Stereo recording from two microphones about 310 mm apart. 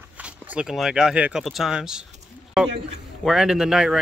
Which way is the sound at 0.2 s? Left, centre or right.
Centre.